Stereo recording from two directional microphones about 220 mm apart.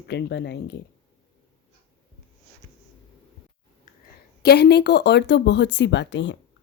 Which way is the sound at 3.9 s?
35° left (ahead or behind).